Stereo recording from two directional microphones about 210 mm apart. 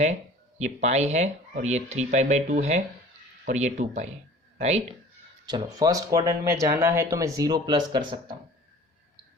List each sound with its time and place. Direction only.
0.6 s speech: 30° right (ahead or behind)
5.5 s speech: 20° right (ahead or behind)